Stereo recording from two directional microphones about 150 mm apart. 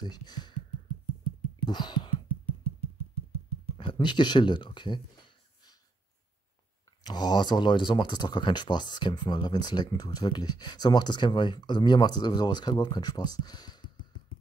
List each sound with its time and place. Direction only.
0.0 s speech: 30° left (ahead or behind)
1.7 s a sound: 30° left (ahead or behind)
3.7 s speech: 30° left (ahead or behind)
7.1 s speech: 25° left (ahead or behind)